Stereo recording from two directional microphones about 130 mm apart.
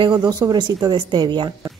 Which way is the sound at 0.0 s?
35° right (ahead or behind).